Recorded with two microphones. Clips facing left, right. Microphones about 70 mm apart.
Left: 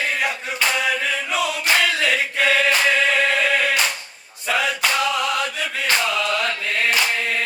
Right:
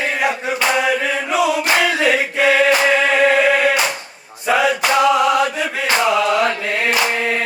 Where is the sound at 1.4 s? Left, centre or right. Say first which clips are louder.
Right 9 dB; centre.